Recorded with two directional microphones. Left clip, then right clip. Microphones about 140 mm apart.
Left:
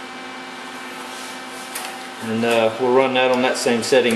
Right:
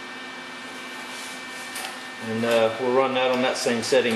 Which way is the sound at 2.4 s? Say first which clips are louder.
Left 3 dB; 25° left (ahead or behind).